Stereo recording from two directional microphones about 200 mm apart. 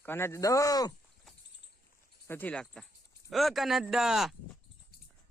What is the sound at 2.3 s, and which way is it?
Speech, 5° left (ahead or behind).